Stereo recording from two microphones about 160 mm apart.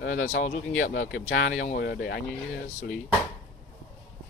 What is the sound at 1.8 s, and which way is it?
Speech, 90° left.